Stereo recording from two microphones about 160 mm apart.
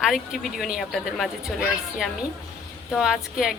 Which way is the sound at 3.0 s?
Centre (ahead or behind).